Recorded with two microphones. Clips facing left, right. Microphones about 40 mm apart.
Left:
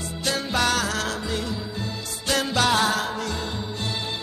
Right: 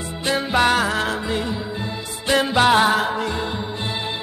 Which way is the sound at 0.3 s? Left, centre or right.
Right.